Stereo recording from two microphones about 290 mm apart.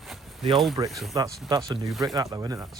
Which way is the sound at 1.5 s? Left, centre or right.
Centre.